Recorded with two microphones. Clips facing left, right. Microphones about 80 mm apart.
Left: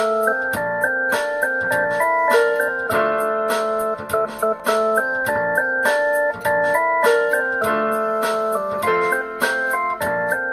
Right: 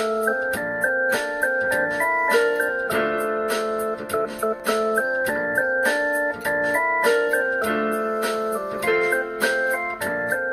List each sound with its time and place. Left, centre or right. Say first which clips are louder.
2.0 s keyboard: left 5 dB; centre
4.6 s organ: left 4 dB; centre
6.6 s organ: left 3 dB; centre
7.6 s music: left 3 dB; left